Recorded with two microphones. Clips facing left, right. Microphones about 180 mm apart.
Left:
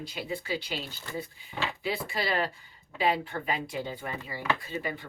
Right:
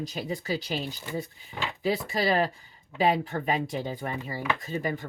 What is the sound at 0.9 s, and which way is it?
Speech, 15° right (ahead or behind).